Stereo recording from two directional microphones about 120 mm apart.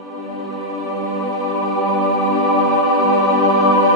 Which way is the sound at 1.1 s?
Centre (ahead or behind).